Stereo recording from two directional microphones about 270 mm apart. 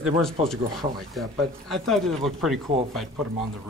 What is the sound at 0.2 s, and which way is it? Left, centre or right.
A man's voice, centre.